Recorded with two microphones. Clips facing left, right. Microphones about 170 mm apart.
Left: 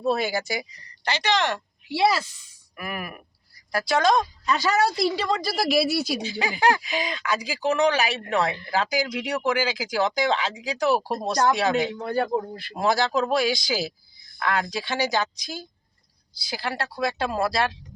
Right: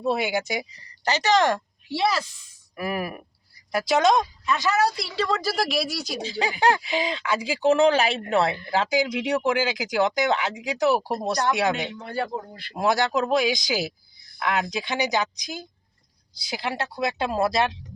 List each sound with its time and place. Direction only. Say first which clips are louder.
0.0 s speech: even; 15° right (ahead or behind)
1.0 s speech: right 4 dB; 40° right (ahead or behind)
1.9 s speech: left 2 dB; 10° left (ahead or behind)
2.7 s speech: right 5 dB; 30° right (ahead or behind)
4.4 s a woman's voice: left 1 dB; 35° left (ahead or behind)
5.3 s speech: left 2 dB; 5° right (ahead or behind)
6.4 s speech: right 1 dB; 25° right (ahead or behind)
11.7 s a man's voice: left 5 dB; 40° left (ahead or behind)
12.8 s speech: even; 20° right (ahead or behind)